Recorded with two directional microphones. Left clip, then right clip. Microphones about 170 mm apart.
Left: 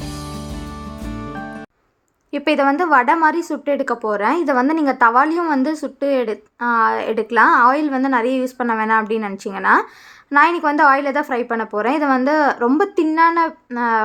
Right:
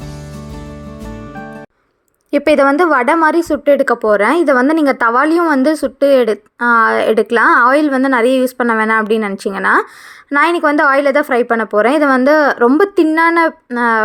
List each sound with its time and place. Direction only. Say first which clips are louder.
2.3 s a woman's voice: right 6 dB; 30° right (ahead or behind)